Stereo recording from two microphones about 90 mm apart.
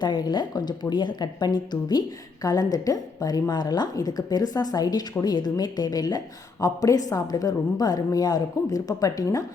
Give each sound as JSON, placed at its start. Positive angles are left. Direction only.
{"t": 0.0, "sound": "speech", "side_deg": 50}